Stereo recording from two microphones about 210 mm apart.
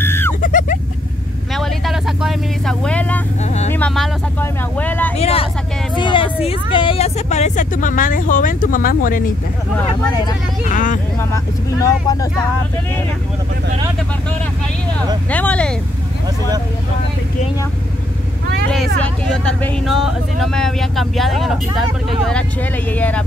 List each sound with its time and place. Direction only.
0.0 s a sound: 10° left (ahead or behind)
0.4 s a sound: 40° left (ahead or behind)
1.5 s vehicle: centre (ahead or behind)
3.4 s speech: 35° left (ahead or behind)
3.7 s speech: 5° left (ahead or behind)
5.1 s speech: 30° left (ahead or behind)
10.6 s speech: 40° left (ahead or behind)
11.1 s speech: 15° left (ahead or behind)
15.2 s speech: 5° left (ahead or behind)
18.9 s speech: 5° left (ahead or behind)